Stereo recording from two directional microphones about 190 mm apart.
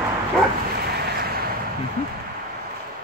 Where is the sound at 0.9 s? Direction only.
55° right (ahead or behind).